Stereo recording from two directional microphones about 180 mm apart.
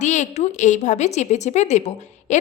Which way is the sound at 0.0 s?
40° left (ahead or behind).